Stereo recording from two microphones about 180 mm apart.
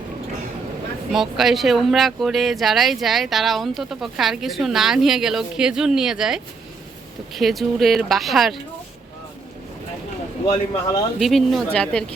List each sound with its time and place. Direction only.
1.1 s speech: centre (ahead or behind)
10.5 s speech: 25° left (ahead or behind)
11.2 s speech: centre (ahead or behind)